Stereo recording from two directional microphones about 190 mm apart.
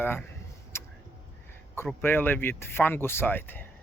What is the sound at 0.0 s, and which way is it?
Speech, 10° left (ahead or behind).